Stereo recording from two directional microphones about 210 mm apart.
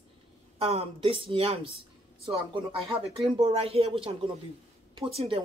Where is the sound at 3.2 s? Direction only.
25° right (ahead or behind).